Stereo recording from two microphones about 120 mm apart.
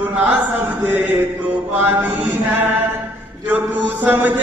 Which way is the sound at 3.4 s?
15° right (ahead or behind).